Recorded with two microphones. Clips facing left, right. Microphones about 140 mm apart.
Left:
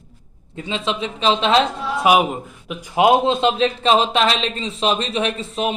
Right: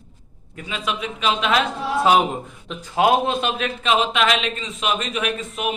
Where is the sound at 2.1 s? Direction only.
10° left (ahead or behind).